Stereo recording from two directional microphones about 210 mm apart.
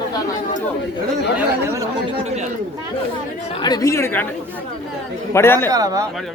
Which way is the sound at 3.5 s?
20° left (ahead or behind).